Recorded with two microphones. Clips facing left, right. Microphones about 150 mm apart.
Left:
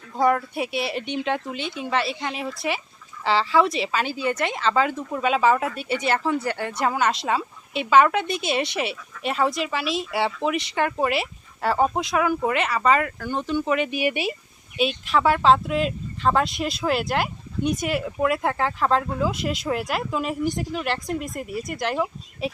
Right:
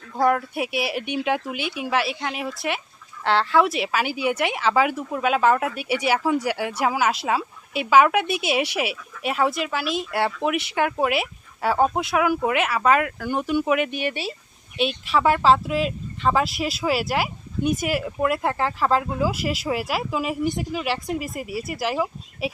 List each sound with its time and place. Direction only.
0.1 s speech: centre (ahead or behind)
14.0 s speech: 15° left (ahead or behind)
14.8 s speech: centre (ahead or behind)